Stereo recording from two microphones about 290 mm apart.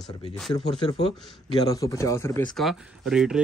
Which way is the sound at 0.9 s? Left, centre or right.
Centre.